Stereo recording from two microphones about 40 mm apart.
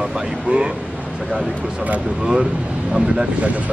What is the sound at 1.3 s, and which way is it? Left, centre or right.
Speech, right.